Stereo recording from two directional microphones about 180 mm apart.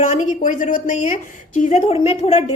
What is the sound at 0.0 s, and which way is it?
A woman's voice, 40° left (ahead or behind).